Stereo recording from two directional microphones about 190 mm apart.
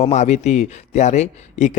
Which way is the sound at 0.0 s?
35° left (ahead or behind).